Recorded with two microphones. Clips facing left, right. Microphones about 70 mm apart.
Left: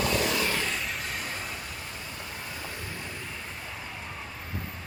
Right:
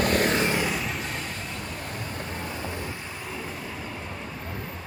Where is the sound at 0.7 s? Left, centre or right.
Centre.